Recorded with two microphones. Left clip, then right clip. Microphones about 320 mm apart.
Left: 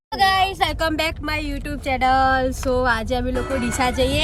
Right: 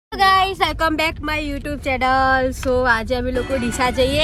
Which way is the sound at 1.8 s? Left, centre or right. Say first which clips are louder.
Even; centre.